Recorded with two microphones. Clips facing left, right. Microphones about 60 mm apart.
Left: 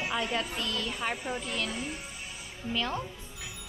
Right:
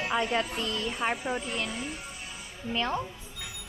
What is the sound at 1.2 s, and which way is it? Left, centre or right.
Speech, centre.